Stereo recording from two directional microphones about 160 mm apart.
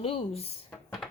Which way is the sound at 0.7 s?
Centre (ahead or behind).